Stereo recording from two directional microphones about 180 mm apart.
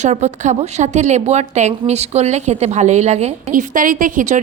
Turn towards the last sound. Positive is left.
turn(degrees=-45)  # may be behind; listen again after turning